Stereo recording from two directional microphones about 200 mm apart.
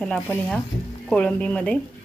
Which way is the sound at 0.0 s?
5° left (ahead or behind).